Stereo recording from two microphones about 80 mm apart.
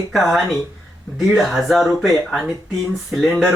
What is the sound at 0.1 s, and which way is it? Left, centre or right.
Speech, centre.